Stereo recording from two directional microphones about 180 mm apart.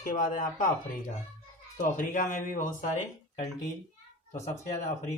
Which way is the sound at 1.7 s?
45° left (ahead or behind).